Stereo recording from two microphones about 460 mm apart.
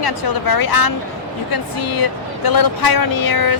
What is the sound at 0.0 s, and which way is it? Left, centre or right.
Speech, left.